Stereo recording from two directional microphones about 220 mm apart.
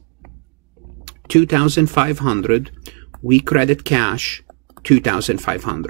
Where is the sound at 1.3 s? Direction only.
5° right (ahead or behind).